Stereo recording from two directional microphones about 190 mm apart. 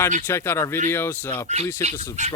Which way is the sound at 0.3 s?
15° left (ahead or behind).